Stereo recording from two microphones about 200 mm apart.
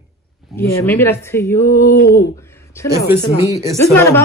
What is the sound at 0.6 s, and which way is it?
Speech, 15° left (ahead or behind).